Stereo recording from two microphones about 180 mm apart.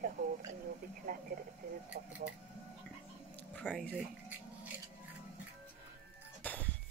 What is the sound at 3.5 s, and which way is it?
Speech, 5° left (ahead or behind).